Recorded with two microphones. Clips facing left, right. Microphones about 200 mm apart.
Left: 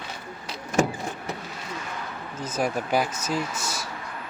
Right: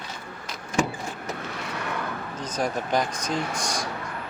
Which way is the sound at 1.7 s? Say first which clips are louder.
Right 4 dB; 65° right (ahead or behind).